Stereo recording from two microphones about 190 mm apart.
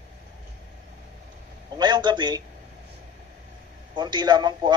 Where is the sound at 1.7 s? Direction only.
25° right (ahead or behind).